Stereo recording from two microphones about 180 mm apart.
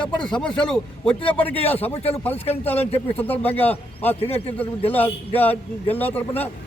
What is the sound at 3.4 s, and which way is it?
Speech, 10° left (ahead or behind).